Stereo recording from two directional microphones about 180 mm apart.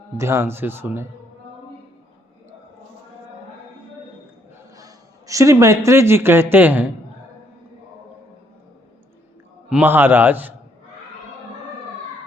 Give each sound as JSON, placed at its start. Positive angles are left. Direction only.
{"t": 0.2, "sound": "a man's voice", "side_deg": -15}
{"t": 4.8, "sound": "a man's voice", "side_deg": -20}
{"t": 9.6, "sound": "a man's voice", "side_deg": -10}